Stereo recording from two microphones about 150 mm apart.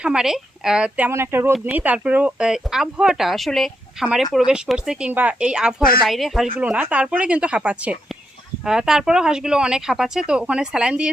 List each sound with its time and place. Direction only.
0.0 s speech: 5° right (ahead or behind)